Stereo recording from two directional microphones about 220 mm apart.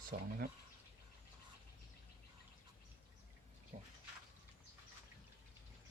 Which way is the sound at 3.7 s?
35° right (ahead or behind).